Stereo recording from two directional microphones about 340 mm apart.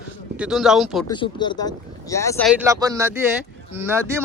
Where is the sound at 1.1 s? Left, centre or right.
Centre.